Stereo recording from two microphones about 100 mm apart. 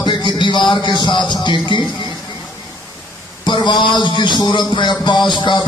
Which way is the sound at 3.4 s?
50° left (ahead or behind).